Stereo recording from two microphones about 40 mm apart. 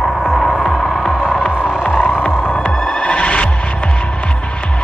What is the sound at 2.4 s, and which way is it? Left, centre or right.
Music, left.